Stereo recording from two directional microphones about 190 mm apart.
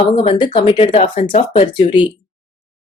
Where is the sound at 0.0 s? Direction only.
25° left (ahead or behind).